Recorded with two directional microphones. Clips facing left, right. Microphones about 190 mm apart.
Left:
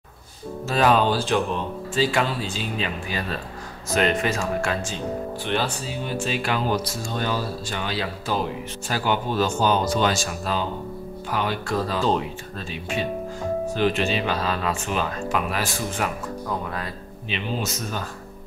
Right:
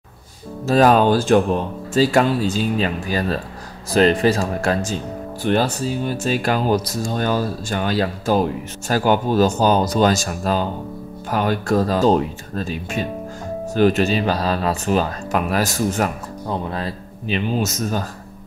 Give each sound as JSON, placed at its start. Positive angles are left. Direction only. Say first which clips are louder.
{"t": 0.7, "sound": "speech", "louder": "right 6 dB", "side_deg": -40}
{"t": 16.4, "sound": "speech", "louder": "right 6 dB", "side_deg": -30}
{"t": 17.3, "sound": "speech", "louder": "right 7 dB", "side_deg": -45}